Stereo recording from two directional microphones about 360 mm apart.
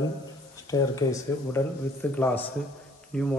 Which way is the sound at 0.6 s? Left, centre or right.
Centre.